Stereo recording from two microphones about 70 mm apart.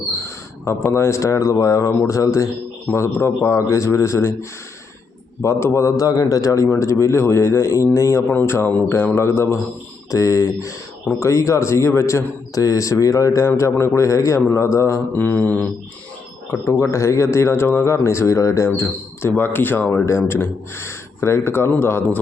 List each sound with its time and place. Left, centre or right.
0.6 s a man's voice: left
6.0 s a man's voice: left
6.7 s a man's voice: left
8.3 s a man's voice: left
10.1 s a man's voice: left
13.6 s a man's voice: left
15.1 s mantra: left
16.5 s a man's voice: left
20.1 s a man's voice: left